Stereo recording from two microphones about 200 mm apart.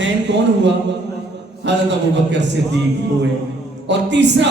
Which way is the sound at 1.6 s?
60° right (ahead or behind).